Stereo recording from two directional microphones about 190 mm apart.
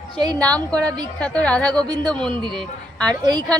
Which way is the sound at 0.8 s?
20° right (ahead or behind).